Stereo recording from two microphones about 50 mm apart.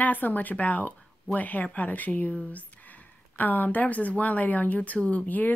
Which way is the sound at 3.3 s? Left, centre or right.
Left.